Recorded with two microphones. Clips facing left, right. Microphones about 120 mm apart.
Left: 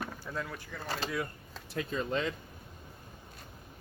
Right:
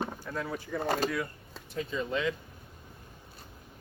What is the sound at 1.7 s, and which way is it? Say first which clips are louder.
Speech: even; 65° left (ahead or behind).